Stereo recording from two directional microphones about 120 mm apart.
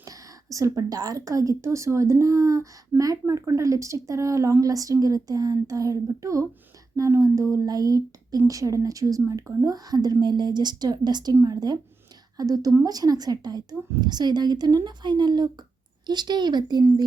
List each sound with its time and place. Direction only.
0.5 s a woman's voice: 30° right (ahead or behind)